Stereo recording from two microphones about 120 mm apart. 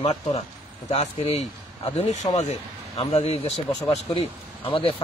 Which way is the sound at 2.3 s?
65° left (ahead or behind).